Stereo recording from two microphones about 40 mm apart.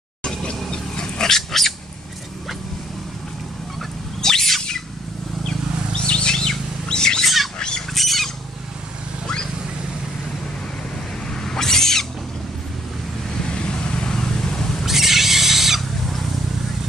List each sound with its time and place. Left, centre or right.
0.2 s a sound: left
0.7 s roaring cats: left
4.2 s bird: centre
5.9 s chirp: left
7.5 s wild animals: centre
7.9 s squawk: centre
11.4 s owl: centre
13.6 s vehicle: left
14.9 s a sound: centre